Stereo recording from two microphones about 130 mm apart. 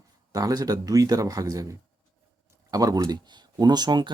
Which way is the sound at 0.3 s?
30° right (ahead or behind).